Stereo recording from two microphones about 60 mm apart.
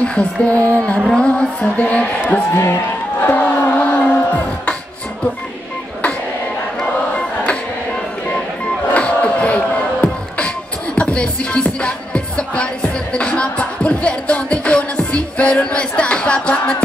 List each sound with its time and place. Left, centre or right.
0.0 s music: centre
0.6 s music: right
0.9 s music: centre
1.2 s music: centre
2.5 s a man's voice: left
3.2 s crowd: left
8.9 s music: left